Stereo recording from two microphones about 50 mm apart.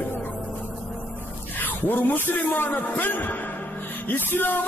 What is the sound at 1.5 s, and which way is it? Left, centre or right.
A man's voice, left.